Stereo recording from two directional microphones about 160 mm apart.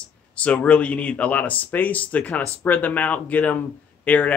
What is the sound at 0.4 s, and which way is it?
Speech, 10° left (ahead or behind).